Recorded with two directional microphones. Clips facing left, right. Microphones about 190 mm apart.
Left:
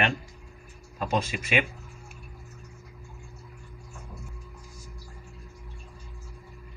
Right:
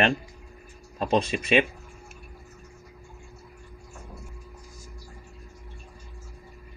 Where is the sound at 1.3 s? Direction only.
30° right (ahead or behind).